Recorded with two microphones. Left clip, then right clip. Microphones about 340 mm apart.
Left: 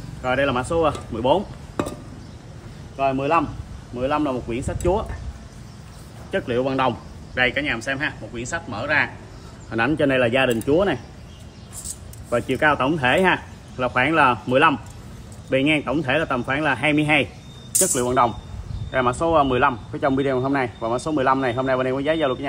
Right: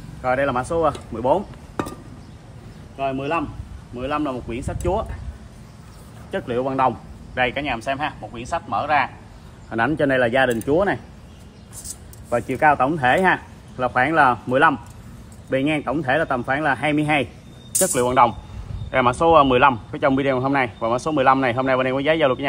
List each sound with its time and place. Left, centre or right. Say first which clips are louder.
0.2 s speech: right 1 dB; centre
1.1 s dishes: even; centre
3.0 s a man's voice: left 4 dB; centre
6.3 s a man's voice: left 1 dB; centre
12.3 s speech: right 2 dB; centre